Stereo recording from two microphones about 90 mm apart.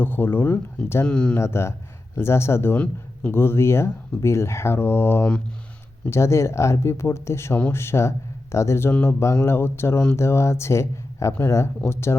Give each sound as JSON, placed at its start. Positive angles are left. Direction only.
{"t": 0.0, "sound": "speech", "side_deg": 25}
{"t": 1.0, "sound": "speech", "side_deg": 10}
{"t": 1.4, "sound": "speech", "side_deg": 30}
{"t": 2.7, "sound": "speech", "side_deg": 15}
{"t": 3.3, "sound": "speech", "side_deg": 25}